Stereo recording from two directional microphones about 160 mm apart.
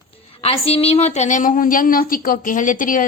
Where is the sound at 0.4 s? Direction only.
35° left (ahead or behind).